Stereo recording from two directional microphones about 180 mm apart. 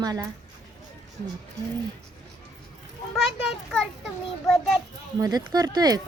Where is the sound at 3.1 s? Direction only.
5° right (ahead or behind).